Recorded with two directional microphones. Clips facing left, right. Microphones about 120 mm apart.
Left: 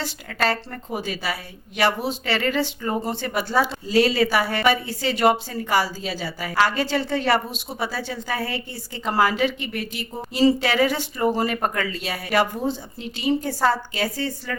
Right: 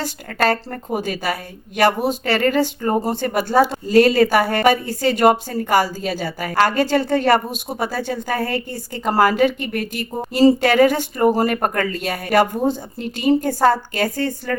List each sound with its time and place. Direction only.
0.0 s a woman's voice: 45° right (ahead or behind)